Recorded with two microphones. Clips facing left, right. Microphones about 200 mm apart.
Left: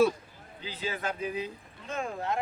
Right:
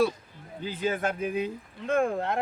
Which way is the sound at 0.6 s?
50° right (ahead or behind).